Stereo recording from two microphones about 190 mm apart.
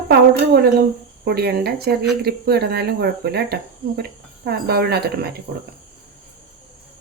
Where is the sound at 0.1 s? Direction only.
55° right (ahead or behind).